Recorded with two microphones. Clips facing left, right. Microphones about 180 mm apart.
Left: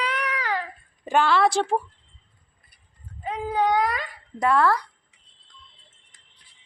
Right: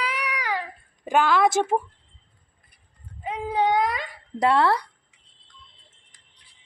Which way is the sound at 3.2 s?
25° right (ahead or behind).